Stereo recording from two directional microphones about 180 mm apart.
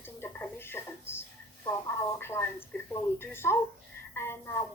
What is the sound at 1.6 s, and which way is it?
Speech, 15° left (ahead or behind).